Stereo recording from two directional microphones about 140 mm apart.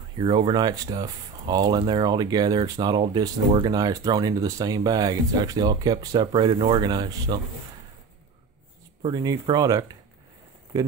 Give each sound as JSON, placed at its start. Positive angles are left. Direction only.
{"t": 0.2, "sound": "speech", "side_deg": -35}
{"t": 9.0, "sound": "speech", "side_deg": -30}